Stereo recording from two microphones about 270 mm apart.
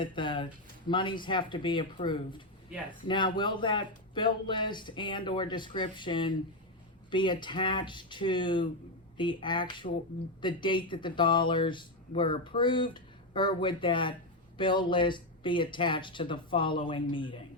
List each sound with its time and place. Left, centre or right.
0.0 s speech: centre